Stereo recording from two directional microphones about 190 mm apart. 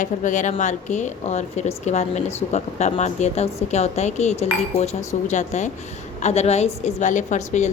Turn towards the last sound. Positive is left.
turn(degrees=40)  # may be behind; listen again after turning